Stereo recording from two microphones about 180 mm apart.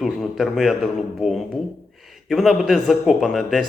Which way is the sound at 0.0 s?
Centre (ahead or behind).